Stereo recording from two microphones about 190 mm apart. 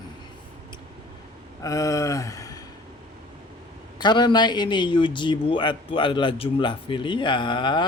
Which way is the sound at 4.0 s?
25° left (ahead or behind).